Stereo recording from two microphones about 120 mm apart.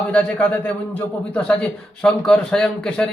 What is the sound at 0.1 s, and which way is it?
A man's voice, 10° left (ahead or behind).